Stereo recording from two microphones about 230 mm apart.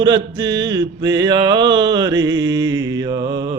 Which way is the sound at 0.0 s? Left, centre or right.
Centre.